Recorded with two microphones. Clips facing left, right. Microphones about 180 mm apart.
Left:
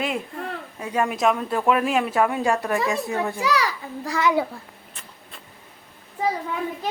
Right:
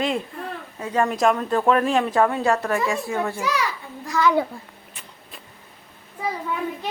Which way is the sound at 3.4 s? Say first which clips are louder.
Left 2 dB; 35° left (ahead or behind).